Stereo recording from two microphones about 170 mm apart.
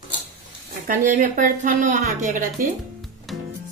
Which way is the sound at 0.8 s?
50° right (ahead or behind).